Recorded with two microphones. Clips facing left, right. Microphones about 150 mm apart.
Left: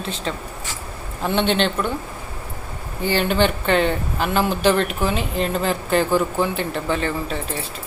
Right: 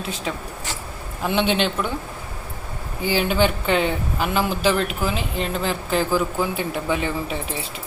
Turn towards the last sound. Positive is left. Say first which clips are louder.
# left 1 dB
turn(degrees=-15)  # may be behind; listen again after turning